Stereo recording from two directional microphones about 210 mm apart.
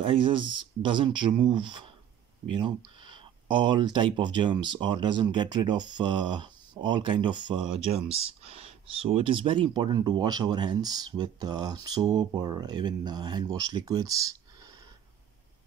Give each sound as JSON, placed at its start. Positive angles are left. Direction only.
{"t": 0.0, "sound": "speech", "side_deg": -25}